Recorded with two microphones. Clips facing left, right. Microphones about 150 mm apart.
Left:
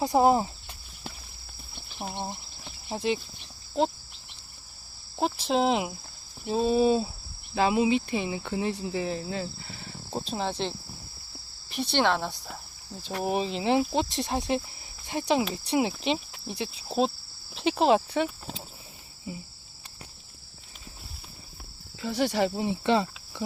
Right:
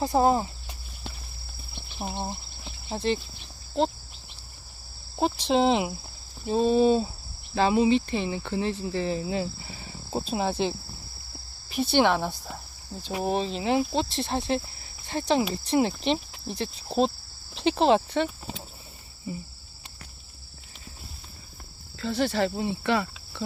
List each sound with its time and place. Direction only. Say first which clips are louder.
0.0 s speech: left 1 dB; 15° left (ahead or behind)
1.7 s cricket: right 2 dB; 5° right (ahead or behind)
2.9 s speech: right 1 dB; 10° left (ahead or behind)
5.1 s speech: right 2 dB; centre (ahead or behind)
9.1 s speech: right 4 dB; 15° right (ahead or behind); by 18.3 s 5° left (ahead or behind)
22.0 s speech: even; 10° left (ahead or behind)